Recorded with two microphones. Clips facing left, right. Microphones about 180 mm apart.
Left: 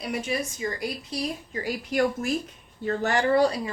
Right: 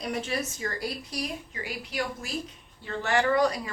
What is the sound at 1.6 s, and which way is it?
A woman's voice, 50° left (ahead or behind).